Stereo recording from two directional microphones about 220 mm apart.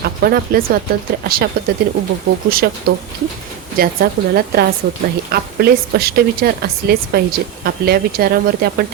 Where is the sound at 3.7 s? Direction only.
45° right (ahead or behind).